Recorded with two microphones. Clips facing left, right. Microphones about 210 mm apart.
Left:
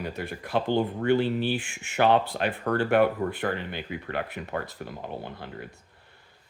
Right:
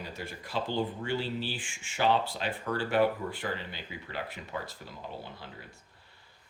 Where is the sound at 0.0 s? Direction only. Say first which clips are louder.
Left 7 dB; 60° left (ahead or behind).